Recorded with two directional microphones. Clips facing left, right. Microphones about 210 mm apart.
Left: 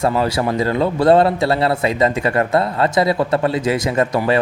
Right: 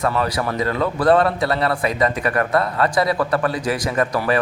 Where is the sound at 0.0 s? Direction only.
25° left (ahead or behind).